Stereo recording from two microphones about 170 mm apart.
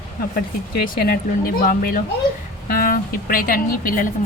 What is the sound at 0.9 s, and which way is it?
A woman's voice, 60° left (ahead or behind).